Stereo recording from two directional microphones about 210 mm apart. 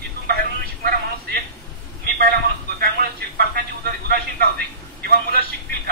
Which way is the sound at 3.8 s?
45° right (ahead or behind).